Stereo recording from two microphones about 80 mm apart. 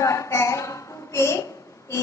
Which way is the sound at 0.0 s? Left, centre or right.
Left.